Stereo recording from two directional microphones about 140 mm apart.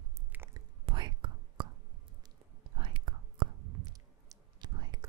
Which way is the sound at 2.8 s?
35° right (ahead or behind).